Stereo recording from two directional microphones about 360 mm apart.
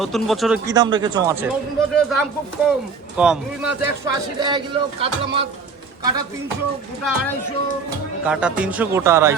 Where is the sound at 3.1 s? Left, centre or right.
Centre.